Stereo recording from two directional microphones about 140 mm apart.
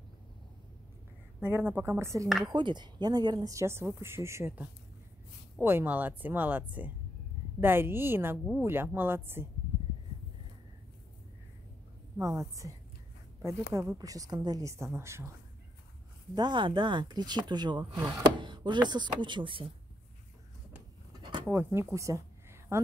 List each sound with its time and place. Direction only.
1.4 s speech: 15° right (ahead or behind)
2.2 s speech: centre (ahead or behind)
2.5 s speech: 35° right (ahead or behind); by 9.5 s 15° right (ahead or behind)
12.2 s speech: 20° right (ahead or behind)
13.7 s speech: 25° right (ahead or behind)
16.3 s speech: 35° right (ahead or behind)
21.2 s a sound: 35° right (ahead or behind)
21.5 s speech: 20° right (ahead or behind)
21.9 s a sound: 20° right (ahead or behind)